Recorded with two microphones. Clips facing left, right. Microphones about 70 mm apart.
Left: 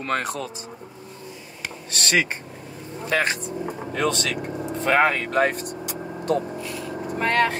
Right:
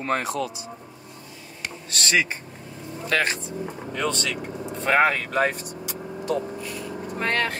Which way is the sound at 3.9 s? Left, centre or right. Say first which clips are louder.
Left 3 dB; centre.